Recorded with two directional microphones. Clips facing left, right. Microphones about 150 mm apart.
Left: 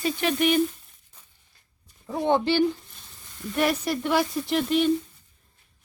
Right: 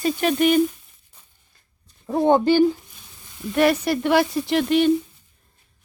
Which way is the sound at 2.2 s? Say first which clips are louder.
Right 6 dB; 45° right (ahead or behind).